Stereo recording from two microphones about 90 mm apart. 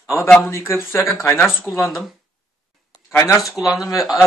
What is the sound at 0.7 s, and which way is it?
Speech, 30° left (ahead or behind).